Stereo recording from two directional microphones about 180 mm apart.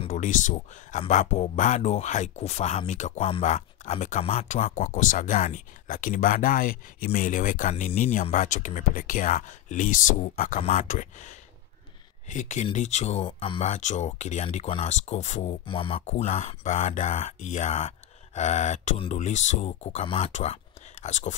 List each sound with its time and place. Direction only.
0.0 s speech: 45° left (ahead or behind)